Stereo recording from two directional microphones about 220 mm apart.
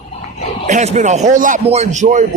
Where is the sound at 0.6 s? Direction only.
30° right (ahead or behind).